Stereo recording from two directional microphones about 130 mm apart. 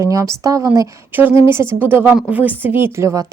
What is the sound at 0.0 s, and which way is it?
Speech, 25° right (ahead or behind).